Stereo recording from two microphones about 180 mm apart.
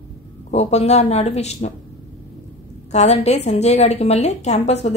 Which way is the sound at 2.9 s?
35° left (ahead or behind).